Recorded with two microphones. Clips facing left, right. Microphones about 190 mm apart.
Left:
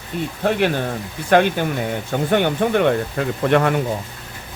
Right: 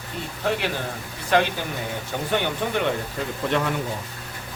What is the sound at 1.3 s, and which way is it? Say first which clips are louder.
Speech: left 6 dB; 55° left (ahead or behind).